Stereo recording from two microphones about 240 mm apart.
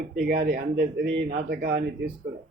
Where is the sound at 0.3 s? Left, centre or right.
Right.